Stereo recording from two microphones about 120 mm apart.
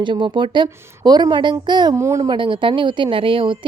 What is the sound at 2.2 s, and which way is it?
A woman's voice, 45° right (ahead or behind).